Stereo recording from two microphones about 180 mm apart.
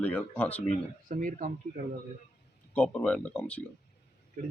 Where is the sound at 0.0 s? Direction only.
5° left (ahead or behind).